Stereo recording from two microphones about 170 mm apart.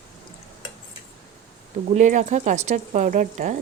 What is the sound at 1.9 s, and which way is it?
Speech, 45° right (ahead or behind).